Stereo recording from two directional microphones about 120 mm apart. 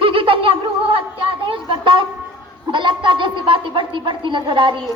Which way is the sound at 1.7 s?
45° right (ahead or behind).